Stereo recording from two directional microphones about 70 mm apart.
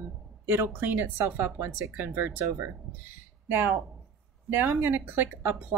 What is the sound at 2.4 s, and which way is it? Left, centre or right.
Speech, right.